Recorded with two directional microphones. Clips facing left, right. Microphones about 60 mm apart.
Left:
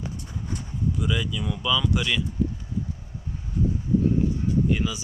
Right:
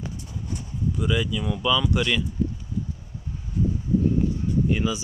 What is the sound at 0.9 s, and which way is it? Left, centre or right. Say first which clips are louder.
Speech: right 5 dB; centre.